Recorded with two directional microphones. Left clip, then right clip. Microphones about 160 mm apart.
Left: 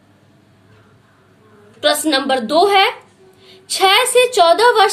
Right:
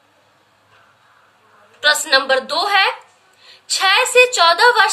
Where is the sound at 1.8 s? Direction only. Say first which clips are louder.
Right 1 dB; 40° left (ahead or behind).